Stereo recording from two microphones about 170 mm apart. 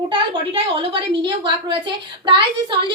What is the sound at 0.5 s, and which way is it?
A woman's voice, 30° right (ahead or behind).